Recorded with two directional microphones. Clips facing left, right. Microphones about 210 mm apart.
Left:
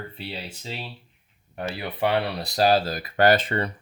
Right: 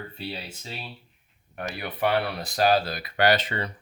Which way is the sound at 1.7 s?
25° left (ahead or behind).